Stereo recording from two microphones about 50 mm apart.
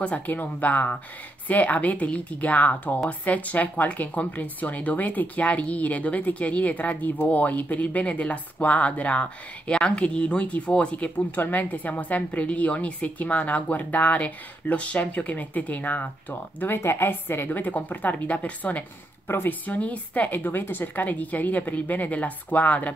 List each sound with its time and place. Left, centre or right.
0.0 s speech: left
17.6 s speech: left
19.2 s speech: left
19.6 s speech: left